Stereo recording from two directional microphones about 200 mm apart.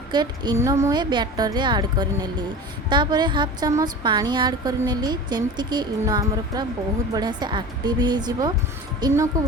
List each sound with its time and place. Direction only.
0.1 s a woman's voice: 20° right (ahead or behind)